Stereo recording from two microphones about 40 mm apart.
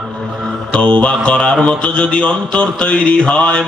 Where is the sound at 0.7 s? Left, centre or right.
Left.